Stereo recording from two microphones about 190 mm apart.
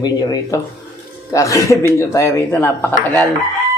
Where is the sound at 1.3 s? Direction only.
15° left (ahead or behind).